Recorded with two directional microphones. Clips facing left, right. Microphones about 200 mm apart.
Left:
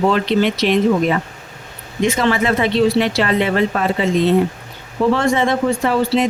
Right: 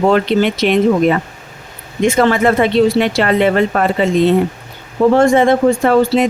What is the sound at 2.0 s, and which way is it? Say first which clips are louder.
Speech: right 5 dB; 50° right (ahead or behind).